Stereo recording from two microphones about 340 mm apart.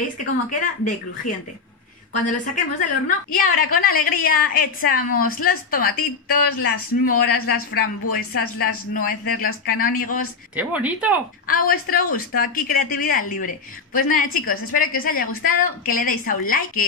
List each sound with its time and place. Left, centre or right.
0.2 s a woman's voice: left
7.1 s a woman's voice: left
10.5 s speech: centre
11.4 s a woman's voice: left